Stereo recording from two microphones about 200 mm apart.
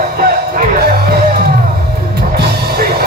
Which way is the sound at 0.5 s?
50° right (ahead or behind).